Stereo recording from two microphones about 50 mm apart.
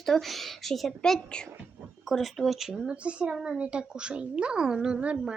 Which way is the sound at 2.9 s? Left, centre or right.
Right.